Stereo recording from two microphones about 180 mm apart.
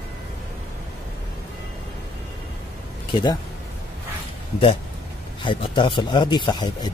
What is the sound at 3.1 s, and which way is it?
Speech, 25° left (ahead or behind).